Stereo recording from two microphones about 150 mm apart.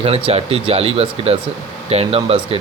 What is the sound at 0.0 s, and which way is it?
Speech, 40° right (ahead or behind).